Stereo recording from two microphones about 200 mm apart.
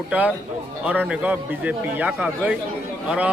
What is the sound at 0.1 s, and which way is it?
A man's voice, 5° right (ahead or behind).